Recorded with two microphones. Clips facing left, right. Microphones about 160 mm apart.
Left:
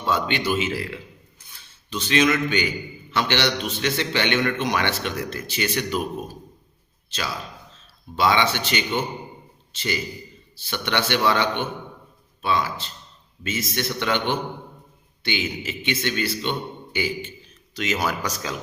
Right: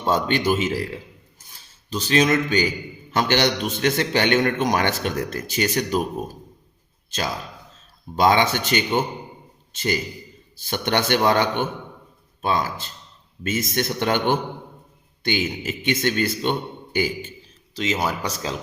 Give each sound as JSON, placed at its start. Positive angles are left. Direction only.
{"t": 0.0, "sound": "a man's voice", "side_deg": -45}
{"t": 1.4, "sound": "filing", "side_deg": -40}
{"t": 3.1, "sound": "a man's voice", "side_deg": -45}
{"t": 17.7, "sound": "speech", "side_deg": -25}